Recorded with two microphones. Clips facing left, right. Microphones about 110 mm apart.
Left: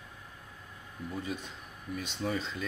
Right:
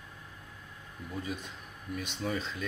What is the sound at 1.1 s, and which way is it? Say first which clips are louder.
Speech: even; centre (ahead or behind).